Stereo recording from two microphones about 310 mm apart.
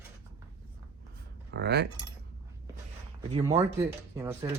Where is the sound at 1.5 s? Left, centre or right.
Right.